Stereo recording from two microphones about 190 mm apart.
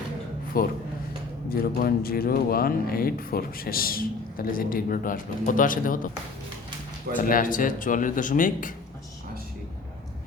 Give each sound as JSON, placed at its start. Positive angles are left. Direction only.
{"t": 0.5, "sound": "speech", "side_deg": 50}
{"t": 7.2, "sound": "speech", "side_deg": 45}